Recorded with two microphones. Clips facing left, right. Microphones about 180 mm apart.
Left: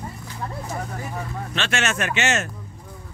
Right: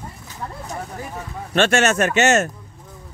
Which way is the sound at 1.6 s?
45° right (ahead or behind).